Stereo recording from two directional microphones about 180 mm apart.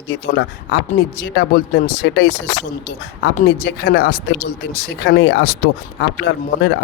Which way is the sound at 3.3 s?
55° left (ahead or behind).